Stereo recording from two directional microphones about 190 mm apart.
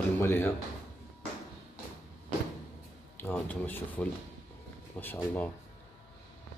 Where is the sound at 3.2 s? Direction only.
10° left (ahead or behind).